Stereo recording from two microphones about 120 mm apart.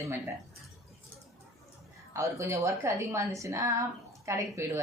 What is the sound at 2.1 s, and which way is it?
A woman's voice, 25° right (ahead or behind).